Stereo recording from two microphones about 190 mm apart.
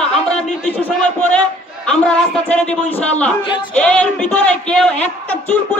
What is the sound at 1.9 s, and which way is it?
Speech, 5° left (ahead or behind).